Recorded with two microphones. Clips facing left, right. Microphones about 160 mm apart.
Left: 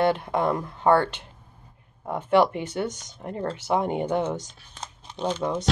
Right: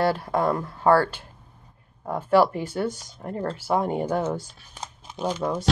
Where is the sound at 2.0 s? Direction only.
20° left (ahead or behind).